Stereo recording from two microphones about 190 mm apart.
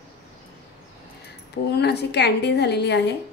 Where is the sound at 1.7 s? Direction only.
60° left (ahead or behind).